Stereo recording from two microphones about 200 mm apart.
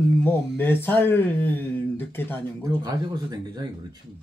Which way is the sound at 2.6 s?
20° right (ahead or behind).